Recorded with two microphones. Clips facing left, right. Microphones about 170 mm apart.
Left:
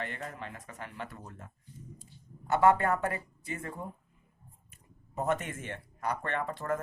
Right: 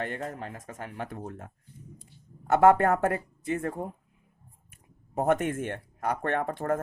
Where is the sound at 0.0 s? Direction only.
50° right (ahead or behind).